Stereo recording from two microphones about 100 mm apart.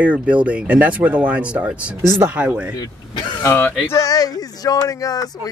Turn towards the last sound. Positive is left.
turn(degrees=40)  # may be behind; listen again after turning